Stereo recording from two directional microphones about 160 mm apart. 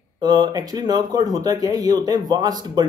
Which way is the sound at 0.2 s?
25° right (ahead or behind).